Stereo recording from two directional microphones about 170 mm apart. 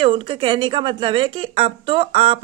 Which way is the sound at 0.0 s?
35° right (ahead or behind).